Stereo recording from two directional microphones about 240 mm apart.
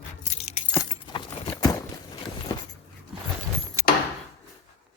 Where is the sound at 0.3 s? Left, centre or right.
Left.